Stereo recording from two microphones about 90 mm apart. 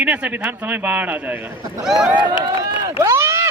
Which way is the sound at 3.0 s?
30° right (ahead or behind).